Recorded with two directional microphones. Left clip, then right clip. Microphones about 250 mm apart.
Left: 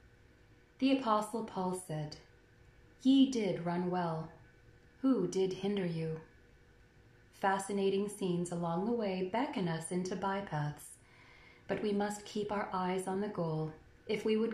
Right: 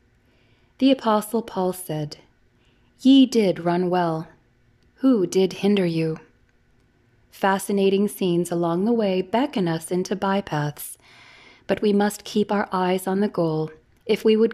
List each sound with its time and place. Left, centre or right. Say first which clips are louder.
0.7 s a woman's voice: right 12 dB; right
7.3 s a woman's voice: right 12 dB; right